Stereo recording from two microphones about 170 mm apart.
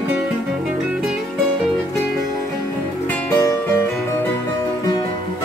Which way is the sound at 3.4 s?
20° left (ahead or behind).